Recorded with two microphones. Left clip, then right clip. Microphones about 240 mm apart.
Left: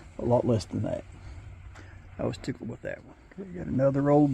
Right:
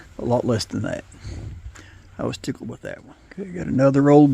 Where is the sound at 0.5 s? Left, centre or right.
Right.